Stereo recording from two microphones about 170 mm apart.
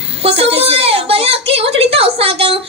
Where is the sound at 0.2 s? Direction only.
35° right (ahead or behind).